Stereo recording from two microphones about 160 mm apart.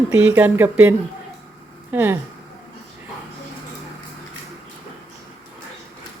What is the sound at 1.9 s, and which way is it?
Speech, 15° right (ahead or behind).